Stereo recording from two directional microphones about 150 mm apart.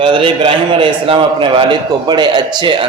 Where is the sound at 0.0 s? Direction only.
35° right (ahead or behind).